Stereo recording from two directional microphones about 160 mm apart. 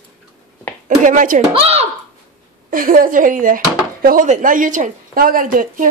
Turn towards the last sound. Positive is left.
turn(degrees=-60)  # may be behind; listen again after turning